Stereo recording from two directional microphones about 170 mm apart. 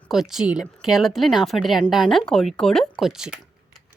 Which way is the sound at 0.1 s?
Centre (ahead or behind).